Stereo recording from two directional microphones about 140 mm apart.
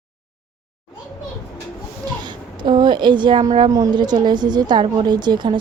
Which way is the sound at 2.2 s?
35° right (ahead or behind).